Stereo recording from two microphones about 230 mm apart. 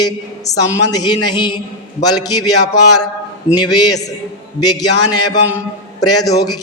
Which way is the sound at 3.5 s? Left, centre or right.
Centre.